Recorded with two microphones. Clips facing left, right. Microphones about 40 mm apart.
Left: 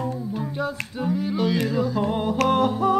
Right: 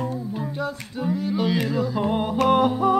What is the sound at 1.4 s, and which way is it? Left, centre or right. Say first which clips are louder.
Music: left 1 dB; centre.